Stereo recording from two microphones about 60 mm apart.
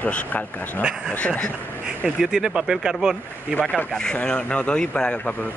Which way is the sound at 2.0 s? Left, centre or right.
Centre.